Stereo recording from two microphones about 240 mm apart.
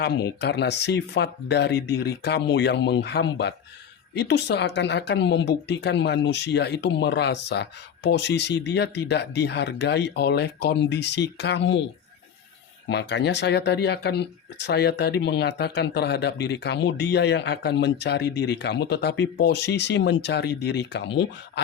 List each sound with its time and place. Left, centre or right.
0.0 s speech: left
12.9 s speech: left